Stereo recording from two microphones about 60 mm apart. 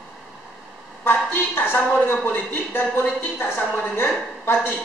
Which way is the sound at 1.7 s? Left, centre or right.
Left.